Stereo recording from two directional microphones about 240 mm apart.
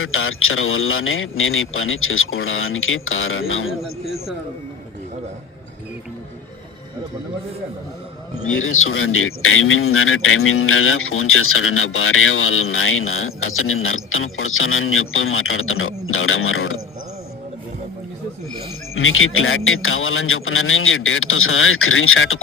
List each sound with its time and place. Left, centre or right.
0.0 s speech: left
8.5 s speech: left
18.9 s speech: left